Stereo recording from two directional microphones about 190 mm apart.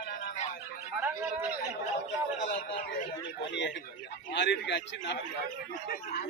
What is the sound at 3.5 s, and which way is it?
A man's voice, 65° left (ahead or behind).